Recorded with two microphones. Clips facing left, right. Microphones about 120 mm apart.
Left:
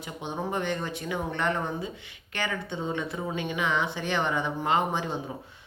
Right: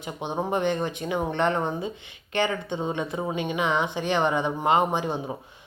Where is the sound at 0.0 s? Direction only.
20° right (ahead or behind).